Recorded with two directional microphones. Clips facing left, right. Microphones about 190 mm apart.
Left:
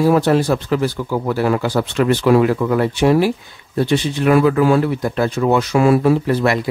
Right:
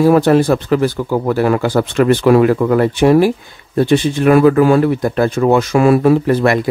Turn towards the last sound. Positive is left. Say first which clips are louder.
# right 4 dB
turn(degrees=-50)  # may be behind; listen again after turning